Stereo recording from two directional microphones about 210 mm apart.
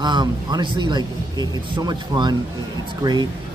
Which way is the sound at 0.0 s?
20° right (ahead or behind).